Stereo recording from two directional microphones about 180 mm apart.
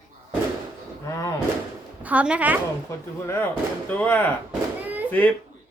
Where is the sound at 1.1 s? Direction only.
15° left (ahead or behind).